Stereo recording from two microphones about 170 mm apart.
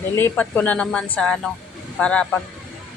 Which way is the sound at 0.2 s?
10° left (ahead or behind).